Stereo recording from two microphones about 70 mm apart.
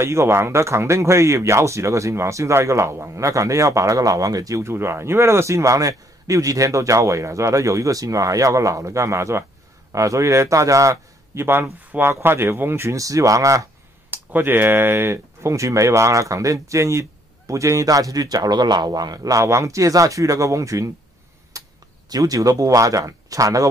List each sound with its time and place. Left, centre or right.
0.0 s a man's voice: right
11.4 s speech: right
12.9 s speech: right
14.1 s speech: right
21.5 s a sound: right
22.1 s speech: right